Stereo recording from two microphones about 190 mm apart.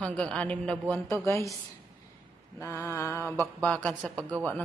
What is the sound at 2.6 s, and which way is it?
A man's voice, 15° left (ahead or behind).